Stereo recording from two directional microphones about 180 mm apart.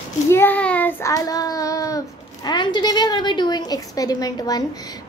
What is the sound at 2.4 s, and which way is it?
A woman's voice, 25° left (ahead or behind).